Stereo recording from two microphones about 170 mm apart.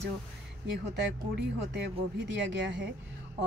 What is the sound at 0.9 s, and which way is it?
Speech, 80° right.